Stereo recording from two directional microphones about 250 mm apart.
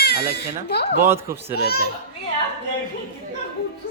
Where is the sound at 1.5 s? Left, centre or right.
Left.